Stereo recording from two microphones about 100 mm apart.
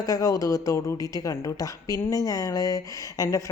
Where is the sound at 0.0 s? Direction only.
35° left (ahead or behind).